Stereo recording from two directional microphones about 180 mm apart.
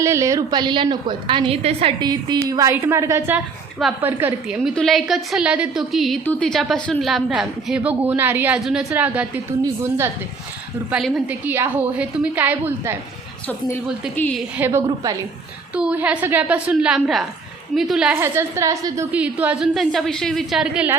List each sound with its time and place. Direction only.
0.0 s a woman's voice: 15° right (ahead or behind)
10.9 s a woman's voice: 5° right (ahead or behind)
14.2 s a woman's voice: 10° left (ahead or behind)
15.7 s a woman's voice: 5° right (ahead or behind)